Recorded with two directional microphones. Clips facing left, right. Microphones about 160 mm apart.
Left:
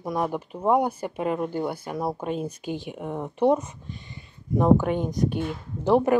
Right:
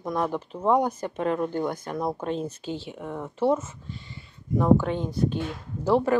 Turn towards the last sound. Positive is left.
turn(degrees=15)  # may be behind; listen again after turning